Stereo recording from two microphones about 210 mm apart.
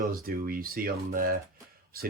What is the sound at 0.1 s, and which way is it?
Speech, 45° right (ahead or behind).